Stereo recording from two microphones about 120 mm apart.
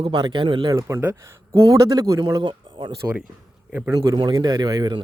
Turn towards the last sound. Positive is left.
turn(degrees=-35)  # may be behind; listen again after turning